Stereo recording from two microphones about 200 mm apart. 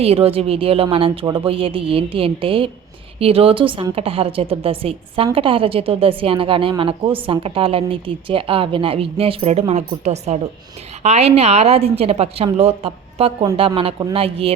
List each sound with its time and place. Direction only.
0.0 s a woman's voice: 30° right (ahead or behind)